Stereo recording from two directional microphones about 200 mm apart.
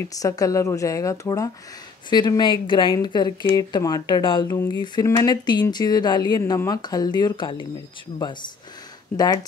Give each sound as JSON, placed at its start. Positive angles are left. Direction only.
{"t": 0.2, "sound": "a woman's voice", "side_deg": 15}
{"t": 9.1, "sound": "speech", "side_deg": 20}